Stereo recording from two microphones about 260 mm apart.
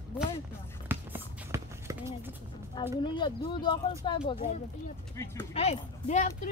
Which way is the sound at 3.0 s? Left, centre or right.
Centre.